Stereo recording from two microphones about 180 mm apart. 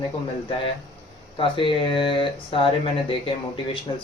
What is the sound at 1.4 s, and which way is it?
Speech, 30° left (ahead or behind).